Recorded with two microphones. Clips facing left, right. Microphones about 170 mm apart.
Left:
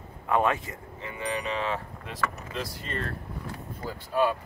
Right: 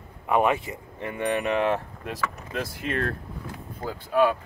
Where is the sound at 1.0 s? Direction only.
60° right (ahead or behind).